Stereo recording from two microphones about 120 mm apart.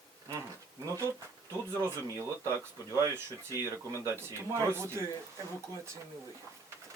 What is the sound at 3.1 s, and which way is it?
Speech, 25° right (ahead or behind).